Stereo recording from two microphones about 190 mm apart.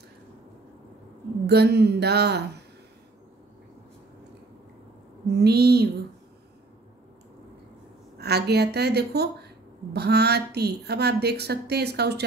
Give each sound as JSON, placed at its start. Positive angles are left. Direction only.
{"t": 1.5, "sound": "a woman's voice", "side_deg": -60}
{"t": 5.3, "sound": "a woman's voice", "side_deg": -60}
{"t": 8.2, "sound": "a woman's voice", "side_deg": -60}